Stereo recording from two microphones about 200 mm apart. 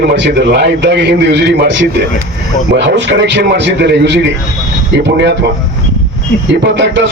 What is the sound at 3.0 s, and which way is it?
A man's voice, 60° right (ahead or behind).